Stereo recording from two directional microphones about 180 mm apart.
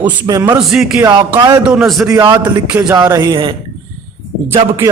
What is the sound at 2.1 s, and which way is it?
A man's voice, 25° right (ahead or behind).